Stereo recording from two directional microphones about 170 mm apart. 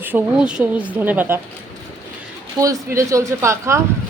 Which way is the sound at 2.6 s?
20° right (ahead or behind).